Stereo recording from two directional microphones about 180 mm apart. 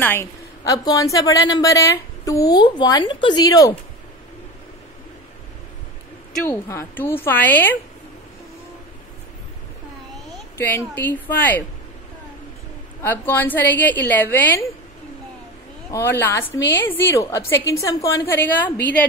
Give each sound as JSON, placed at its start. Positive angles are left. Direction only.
{"t": 0.0, "sound": "a woman's voice", "side_deg": 15}
{"t": 6.4, "sound": "a woman's voice", "side_deg": 10}
{"t": 10.6, "sound": "a woman's voice", "side_deg": 10}
{"t": 13.0, "sound": "a woman's voice", "side_deg": 10}
{"t": 15.9, "sound": "a woman's voice", "side_deg": 10}